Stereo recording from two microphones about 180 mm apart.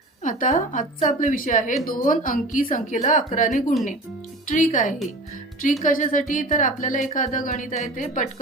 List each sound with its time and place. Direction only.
0.2 s a woman's voice: 45° left (ahead or behind)